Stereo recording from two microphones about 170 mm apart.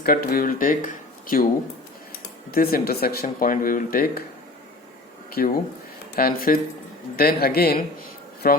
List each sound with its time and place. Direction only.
0.0 s speech: 60° left (ahead or behind)
2.5 s speech: 60° left (ahead or behind)
5.4 s speech: 60° left (ahead or behind)